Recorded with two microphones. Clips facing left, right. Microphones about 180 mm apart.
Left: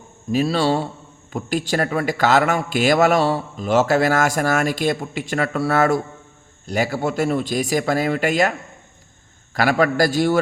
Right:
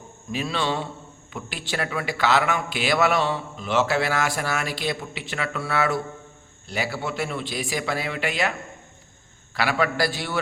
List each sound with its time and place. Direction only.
0.3 s a man's voice: 40° left (ahead or behind)
9.6 s a man's voice: 45° left (ahead or behind)